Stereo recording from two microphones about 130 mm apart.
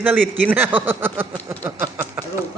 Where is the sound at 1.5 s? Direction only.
20° right (ahead or behind).